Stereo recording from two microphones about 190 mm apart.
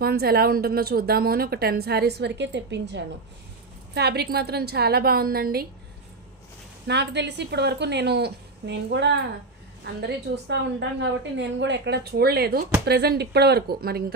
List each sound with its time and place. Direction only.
0.0 s a woman's voice: 55° right (ahead or behind)
6.9 s a woman's voice: 65° right (ahead or behind)